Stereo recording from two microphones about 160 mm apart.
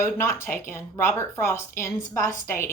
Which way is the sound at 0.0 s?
15° left (ahead or behind).